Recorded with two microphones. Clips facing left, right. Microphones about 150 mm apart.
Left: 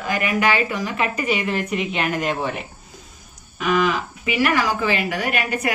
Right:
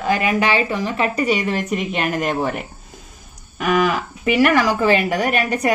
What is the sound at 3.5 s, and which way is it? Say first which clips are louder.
Speech: right 2 dB; 50° right (ahead or behind).